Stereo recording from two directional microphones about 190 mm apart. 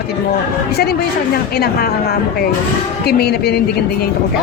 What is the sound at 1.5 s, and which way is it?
Speech, 55° left (ahead or behind).